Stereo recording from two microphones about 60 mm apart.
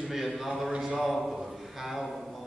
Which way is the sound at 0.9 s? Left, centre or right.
Centre.